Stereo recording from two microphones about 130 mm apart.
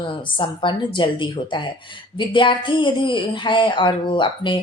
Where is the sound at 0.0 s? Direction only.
40° left (ahead or behind).